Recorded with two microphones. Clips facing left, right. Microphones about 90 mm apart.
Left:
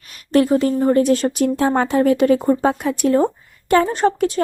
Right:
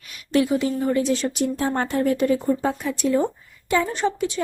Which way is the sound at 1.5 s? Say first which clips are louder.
Left 6 dB; 90° left.